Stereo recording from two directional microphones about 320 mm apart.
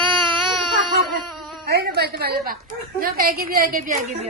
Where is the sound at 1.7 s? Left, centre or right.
Right.